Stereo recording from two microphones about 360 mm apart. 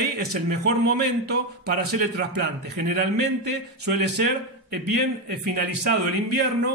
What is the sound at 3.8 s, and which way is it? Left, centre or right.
Speech, right.